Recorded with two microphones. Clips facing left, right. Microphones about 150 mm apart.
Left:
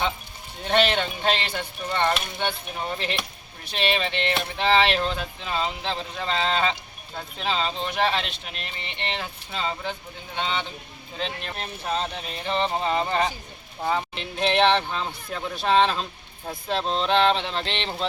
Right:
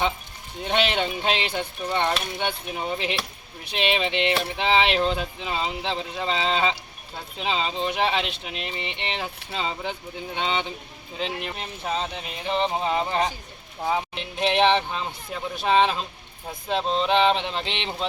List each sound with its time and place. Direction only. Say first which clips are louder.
0.7 s speech: left 2 dB; 10° right (ahead or behind)